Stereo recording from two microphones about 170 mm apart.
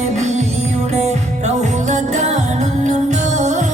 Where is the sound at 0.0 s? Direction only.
45° right (ahead or behind).